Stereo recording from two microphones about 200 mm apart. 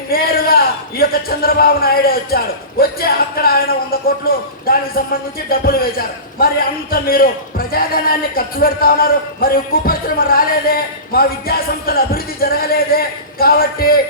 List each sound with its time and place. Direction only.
0.1 s a man's voice: 50° left (ahead or behind)